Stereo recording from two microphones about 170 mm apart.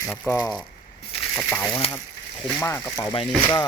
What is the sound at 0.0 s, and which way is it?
Speech, 20° left (ahead or behind).